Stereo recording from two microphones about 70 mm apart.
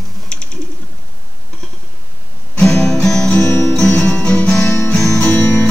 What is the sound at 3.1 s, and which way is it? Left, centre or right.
Music, centre.